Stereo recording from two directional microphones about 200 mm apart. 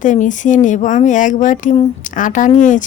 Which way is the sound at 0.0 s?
40° left (ahead or behind).